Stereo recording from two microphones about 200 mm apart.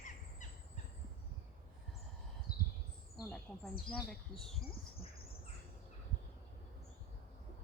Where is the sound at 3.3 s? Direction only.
Centre (ahead or behind).